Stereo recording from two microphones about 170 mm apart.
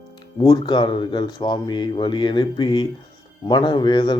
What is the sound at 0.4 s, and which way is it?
A man's voice, 25° left (ahead or behind).